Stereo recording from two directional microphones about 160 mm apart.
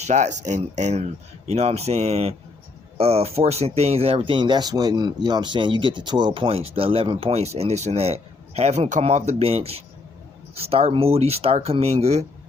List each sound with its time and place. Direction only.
0.0 s speech: 45° right (ahead or behind)